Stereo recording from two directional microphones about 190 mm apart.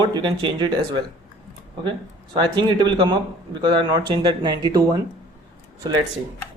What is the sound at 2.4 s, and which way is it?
Speech, 25° right (ahead or behind).